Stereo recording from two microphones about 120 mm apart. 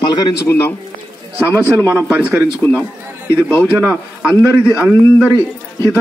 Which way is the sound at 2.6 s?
10° left (ahead or behind).